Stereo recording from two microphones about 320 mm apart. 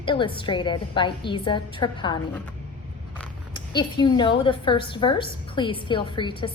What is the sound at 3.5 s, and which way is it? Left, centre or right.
A woman's voice, centre.